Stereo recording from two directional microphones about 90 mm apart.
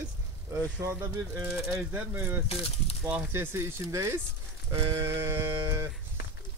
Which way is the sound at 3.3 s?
25° right (ahead or behind).